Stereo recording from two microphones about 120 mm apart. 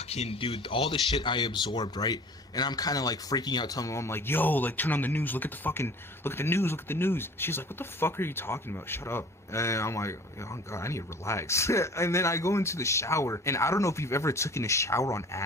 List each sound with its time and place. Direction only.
0.1 s speech: 55° left (ahead or behind); by 15.4 s 25° left (ahead or behind)